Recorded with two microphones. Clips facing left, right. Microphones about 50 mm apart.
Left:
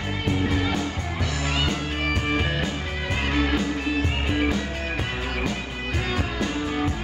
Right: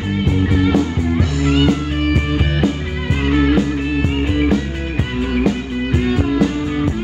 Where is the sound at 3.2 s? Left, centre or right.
Centre.